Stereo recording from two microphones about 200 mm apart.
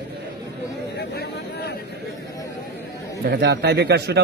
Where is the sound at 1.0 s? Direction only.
55° left (ahead or behind).